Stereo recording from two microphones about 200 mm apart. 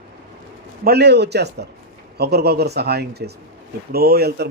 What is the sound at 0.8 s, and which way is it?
Speech, 55° right (ahead or behind).